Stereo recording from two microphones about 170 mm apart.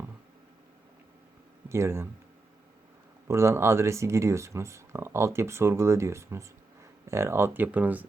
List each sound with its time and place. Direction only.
1.7 s speech: 15° right (ahead or behind)
3.2 s speech: 15° right (ahead or behind)